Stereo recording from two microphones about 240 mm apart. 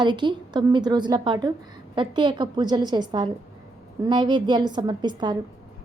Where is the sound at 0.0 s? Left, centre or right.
Centre.